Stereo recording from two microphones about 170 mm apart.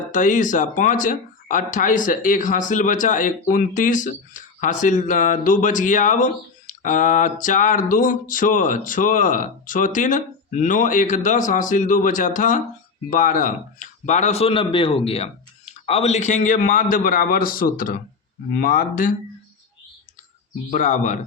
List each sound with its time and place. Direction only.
0.1 s speech: 45° left (ahead or behind)
20.7 s speech: 50° left (ahead or behind)